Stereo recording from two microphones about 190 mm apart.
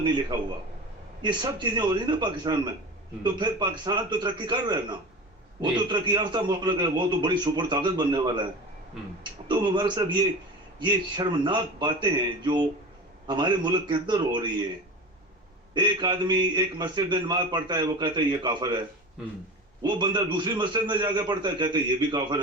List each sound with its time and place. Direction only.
1.2 s a man's voice: 25° right (ahead or behind)
9.5 s a man's voice: 25° right (ahead or behind)
15.7 s a man's voice: 20° right (ahead or behind)
19.8 s a man's voice: 25° right (ahead or behind)